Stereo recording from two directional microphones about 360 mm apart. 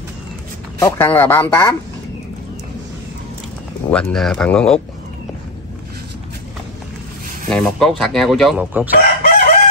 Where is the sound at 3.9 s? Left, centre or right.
Centre.